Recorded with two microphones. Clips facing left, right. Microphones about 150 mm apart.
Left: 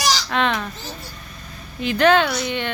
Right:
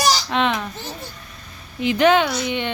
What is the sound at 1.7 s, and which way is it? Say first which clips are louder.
Speech: even; 20° right (ahead or behind).